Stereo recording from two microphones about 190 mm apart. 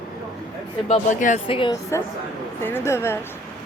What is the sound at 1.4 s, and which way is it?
Speech, 25° left (ahead or behind).